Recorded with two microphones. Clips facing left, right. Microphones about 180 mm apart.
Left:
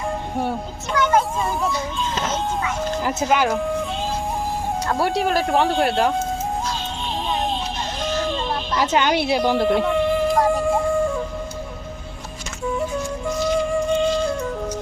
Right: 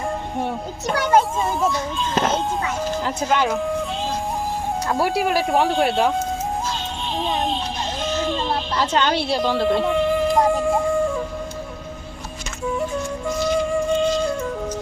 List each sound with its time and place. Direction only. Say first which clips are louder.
1.0 s music: left 5 dB; 35° right (ahead or behind)
1.6 s speech: right 2 dB; centre (ahead or behind)
4.9 s speech: even; centre (ahead or behind)
8.7 s speech: left 2 dB; 10° left (ahead or behind)
9.6 s music: even; centre (ahead or behind)
12.6 s flute: even; centre (ahead or behind)